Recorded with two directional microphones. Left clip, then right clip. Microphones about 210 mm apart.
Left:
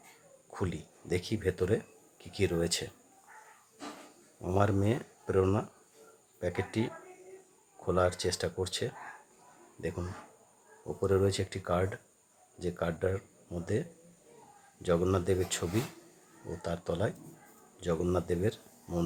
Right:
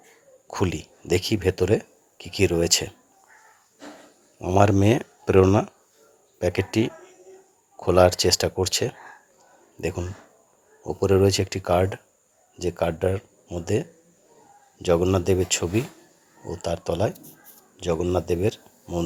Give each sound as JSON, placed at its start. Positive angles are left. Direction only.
{"t": 0.5, "sound": "speech", "side_deg": -35}
{"t": 4.4, "sound": "speech", "side_deg": -30}